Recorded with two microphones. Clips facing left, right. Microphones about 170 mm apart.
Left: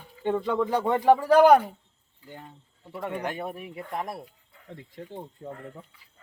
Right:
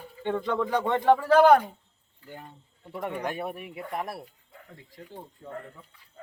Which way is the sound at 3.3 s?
5° right (ahead or behind).